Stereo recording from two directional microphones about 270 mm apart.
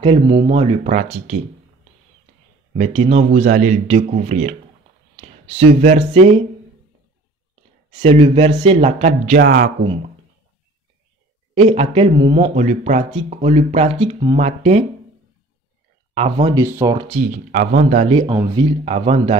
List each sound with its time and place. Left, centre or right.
0.0 s speech: centre
2.8 s speech: right
7.9 s speech: centre
9.4 s speech: right
11.5 s speech: right
16.2 s speech: right
16.6 s speech: centre
17.3 s speech: right